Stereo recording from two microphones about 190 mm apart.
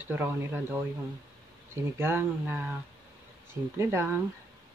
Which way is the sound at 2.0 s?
15° right (ahead or behind).